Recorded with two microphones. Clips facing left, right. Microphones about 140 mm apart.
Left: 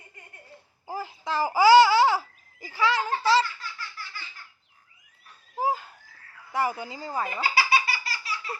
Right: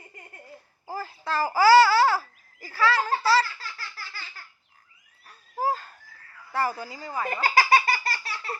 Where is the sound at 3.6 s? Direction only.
35° right (ahead or behind).